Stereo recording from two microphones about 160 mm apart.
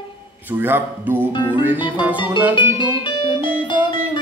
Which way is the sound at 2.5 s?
30° left (ahead or behind).